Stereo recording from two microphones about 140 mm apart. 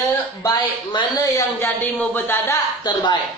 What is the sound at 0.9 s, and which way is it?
Speech, 25° left (ahead or behind).